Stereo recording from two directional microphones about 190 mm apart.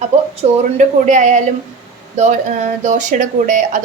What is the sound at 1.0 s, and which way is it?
A woman's voice, 40° right (ahead or behind).